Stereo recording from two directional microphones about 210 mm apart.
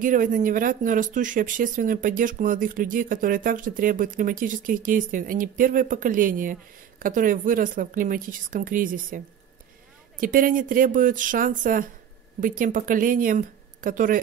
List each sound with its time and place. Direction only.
0.0 s speech: 40° right (ahead or behind)
10.2 s speech: 40° right (ahead or behind)